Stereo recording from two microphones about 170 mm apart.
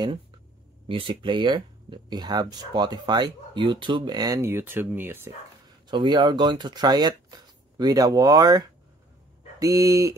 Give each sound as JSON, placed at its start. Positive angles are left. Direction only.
{"t": 0.8, "sound": "speech", "side_deg": -30}
{"t": 5.9, "sound": "speech", "side_deg": -25}